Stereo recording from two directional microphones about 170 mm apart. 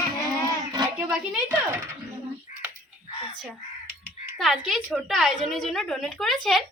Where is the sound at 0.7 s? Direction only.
20° right (ahead or behind).